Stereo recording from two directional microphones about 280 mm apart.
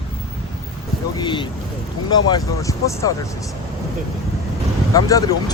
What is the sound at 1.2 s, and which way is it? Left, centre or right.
Speech, centre.